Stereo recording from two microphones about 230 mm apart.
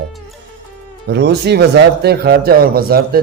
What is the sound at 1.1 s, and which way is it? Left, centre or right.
Speech, right.